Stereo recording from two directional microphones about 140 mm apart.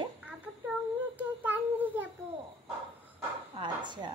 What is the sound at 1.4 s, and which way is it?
Child singing, 10° right (ahead or behind).